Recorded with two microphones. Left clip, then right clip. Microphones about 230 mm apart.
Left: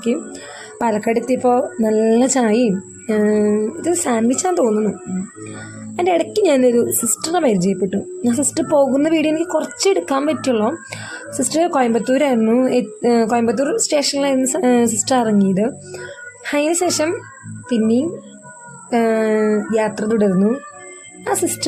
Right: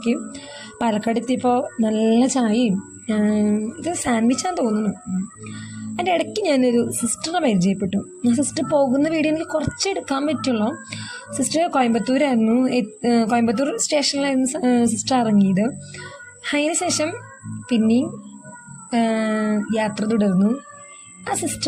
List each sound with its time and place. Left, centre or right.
0.9 s a woman's voice: centre
1.3 s a woman's voice: right
1.9 s a woman's voice: centre
2.1 s a woman's voice: centre
6.0 s a woman's voice: right